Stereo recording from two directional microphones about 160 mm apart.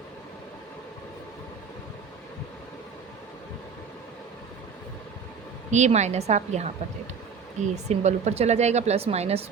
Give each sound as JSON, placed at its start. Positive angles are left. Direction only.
{"t": 5.7, "sound": "speech", "side_deg": -45}
{"t": 7.9, "sound": "speech", "side_deg": -45}